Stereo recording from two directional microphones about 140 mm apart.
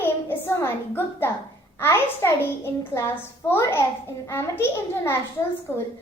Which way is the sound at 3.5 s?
20° left (ahead or behind).